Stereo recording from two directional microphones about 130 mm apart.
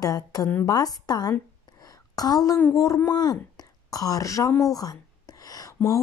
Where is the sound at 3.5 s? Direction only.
30° left (ahead or behind).